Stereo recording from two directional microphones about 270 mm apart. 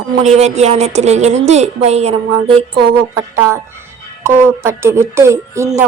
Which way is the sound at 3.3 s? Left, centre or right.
Centre.